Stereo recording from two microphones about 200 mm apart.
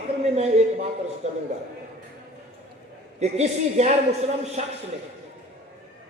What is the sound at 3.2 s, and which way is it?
A man's voice, 35° right (ahead or behind).